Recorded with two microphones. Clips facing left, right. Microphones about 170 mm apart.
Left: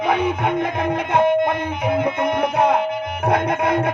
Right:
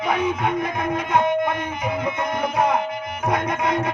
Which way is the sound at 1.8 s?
60° left (ahead or behind).